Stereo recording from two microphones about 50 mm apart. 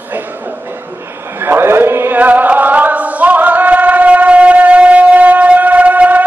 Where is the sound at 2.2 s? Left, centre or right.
Right.